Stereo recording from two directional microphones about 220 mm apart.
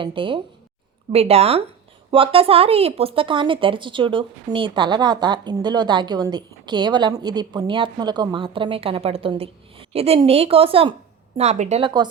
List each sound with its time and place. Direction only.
0.0 s speech: 25° right (ahead or behind)